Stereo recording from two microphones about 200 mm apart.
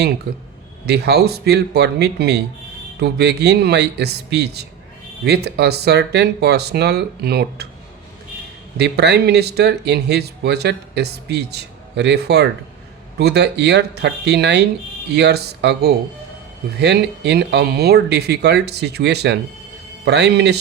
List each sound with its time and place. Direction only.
0.3 s speech: 55° right (ahead or behind)
8.8 s speech: 55° right (ahead or behind)